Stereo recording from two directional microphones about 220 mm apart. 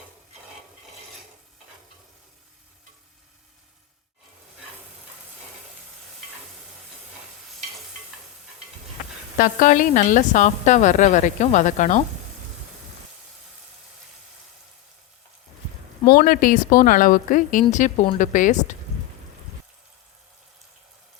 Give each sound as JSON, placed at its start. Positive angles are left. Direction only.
{"t": 9.4, "sound": "a woman's voice", "side_deg": 35}
{"t": 16.0, "sound": "a woman's voice", "side_deg": 45}